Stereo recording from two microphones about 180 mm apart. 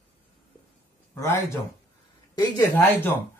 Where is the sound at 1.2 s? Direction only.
15° left (ahead or behind).